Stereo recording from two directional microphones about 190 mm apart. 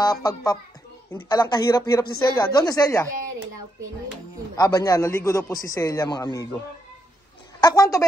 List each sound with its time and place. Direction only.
0.0 s a man's voice: 20° left (ahead or behind)
4.6 s a man's voice: 20° left (ahead or behind)
7.6 s a man's voice: 20° left (ahead or behind)